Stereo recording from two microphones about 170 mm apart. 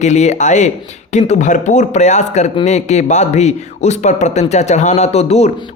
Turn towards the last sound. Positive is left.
turn(degrees=40)  # may be behind; listen again after turning